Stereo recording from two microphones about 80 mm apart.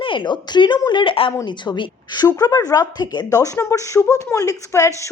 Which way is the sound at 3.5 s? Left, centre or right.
Left.